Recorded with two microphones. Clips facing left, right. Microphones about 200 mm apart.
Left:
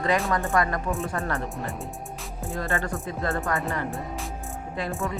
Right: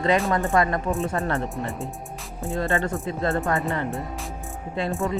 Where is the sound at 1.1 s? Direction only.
30° right (ahead or behind).